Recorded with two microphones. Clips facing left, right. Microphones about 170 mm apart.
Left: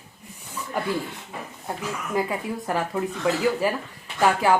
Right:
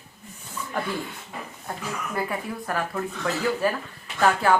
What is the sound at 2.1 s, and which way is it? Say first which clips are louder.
Speech: left 4 dB; 20° left (ahead or behind).